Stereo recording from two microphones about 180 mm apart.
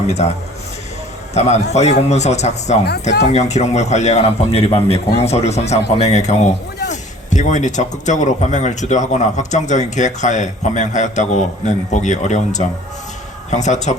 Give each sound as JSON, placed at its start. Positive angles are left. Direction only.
{"t": 0.1, "sound": "a man's voice", "side_deg": 35}